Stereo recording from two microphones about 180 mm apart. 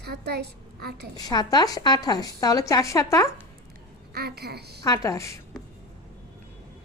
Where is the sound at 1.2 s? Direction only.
20° left (ahead or behind).